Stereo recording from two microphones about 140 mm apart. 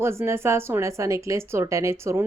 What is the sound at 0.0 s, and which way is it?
Speech, 20° right (ahead or behind).